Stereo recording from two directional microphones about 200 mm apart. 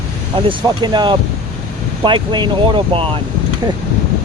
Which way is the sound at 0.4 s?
25° right (ahead or behind).